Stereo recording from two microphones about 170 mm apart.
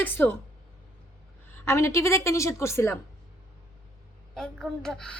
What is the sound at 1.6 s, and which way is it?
A woman's voice, 15° left (ahead or behind).